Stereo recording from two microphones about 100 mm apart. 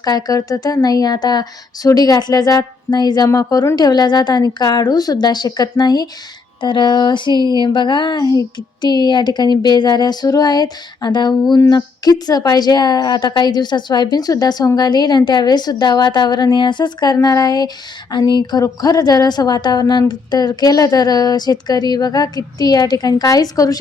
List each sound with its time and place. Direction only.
0.0 s a woman's voice: 40° left (ahead or behind)
3.2 s a woman's voice: 35° left (ahead or behind)
3.8 s speech: 45° left (ahead or behind)
17.2 s a woman's voice: 35° left (ahead or behind)